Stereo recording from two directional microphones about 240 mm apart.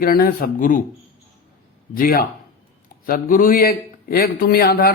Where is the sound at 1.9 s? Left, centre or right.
Left.